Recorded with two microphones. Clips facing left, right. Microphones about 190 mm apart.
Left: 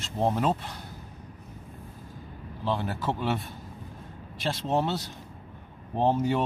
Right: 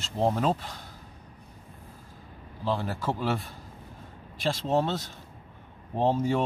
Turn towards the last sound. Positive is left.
turn(degrees=0)  # may be behind; listen again after turning